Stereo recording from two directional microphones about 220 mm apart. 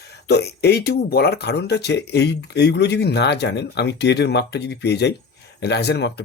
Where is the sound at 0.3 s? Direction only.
50° left (ahead or behind).